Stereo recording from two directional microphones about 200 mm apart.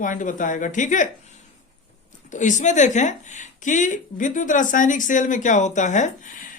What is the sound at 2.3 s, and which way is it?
A woman's voice, 40° left (ahead or behind).